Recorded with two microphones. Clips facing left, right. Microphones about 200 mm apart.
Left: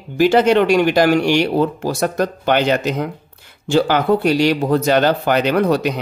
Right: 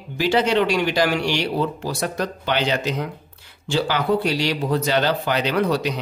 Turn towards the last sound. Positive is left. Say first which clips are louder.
# left 5 dB
turn(degrees=50)  # may be behind; listen again after turning